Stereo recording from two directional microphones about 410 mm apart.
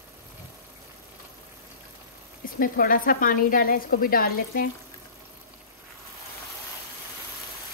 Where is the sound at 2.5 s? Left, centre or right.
Centre.